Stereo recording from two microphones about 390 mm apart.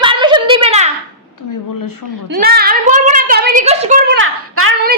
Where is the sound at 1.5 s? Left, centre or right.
Left.